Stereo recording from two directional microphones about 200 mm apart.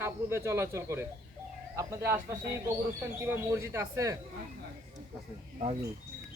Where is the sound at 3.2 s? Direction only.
10° right (ahead or behind).